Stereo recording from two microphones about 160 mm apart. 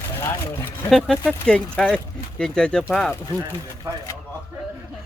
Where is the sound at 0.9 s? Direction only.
Centre (ahead or behind).